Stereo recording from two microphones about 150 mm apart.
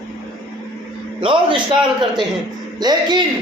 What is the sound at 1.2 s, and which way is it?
Speech, 35° right (ahead or behind).